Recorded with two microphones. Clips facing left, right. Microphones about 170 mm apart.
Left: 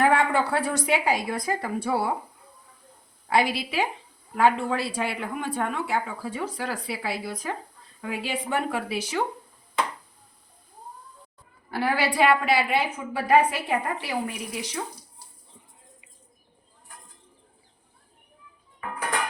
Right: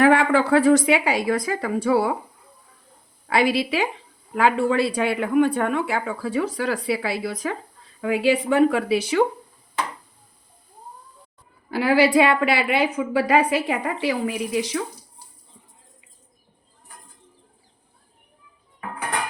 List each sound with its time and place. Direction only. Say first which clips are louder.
0.0 s a woman's voice: right 5 dB; 90° right
3.2 s speech: right 4 dB; 85° right
11.7 s a woman's voice: right 8 dB; 90° right